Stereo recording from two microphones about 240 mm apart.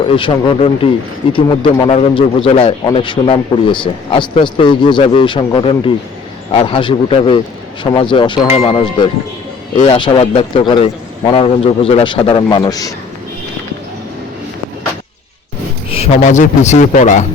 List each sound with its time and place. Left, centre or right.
0.1 s a man's voice: left
15.9 s a man's voice: left